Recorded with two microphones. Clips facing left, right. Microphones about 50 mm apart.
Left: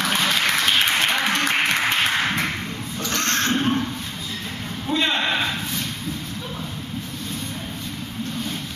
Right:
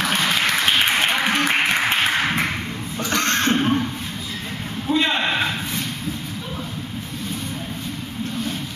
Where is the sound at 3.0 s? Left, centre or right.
Right.